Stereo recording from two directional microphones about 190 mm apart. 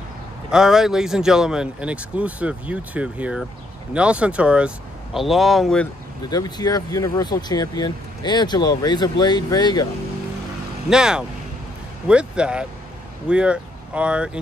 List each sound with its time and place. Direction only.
0.5 s speech: 5° right (ahead or behind)
6.3 s speech: 20° left (ahead or behind)
10.9 s speech: 5° right (ahead or behind)